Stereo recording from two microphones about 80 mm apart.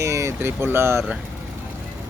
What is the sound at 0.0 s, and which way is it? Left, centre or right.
Speech, right.